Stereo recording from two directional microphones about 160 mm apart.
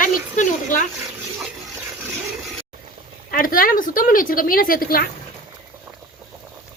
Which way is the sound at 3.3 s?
60° left (ahead or behind).